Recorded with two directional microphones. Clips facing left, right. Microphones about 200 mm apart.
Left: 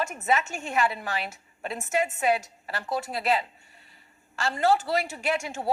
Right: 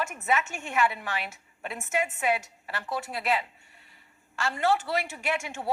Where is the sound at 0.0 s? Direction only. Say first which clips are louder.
Left 2 dB; 35° left (ahead or behind).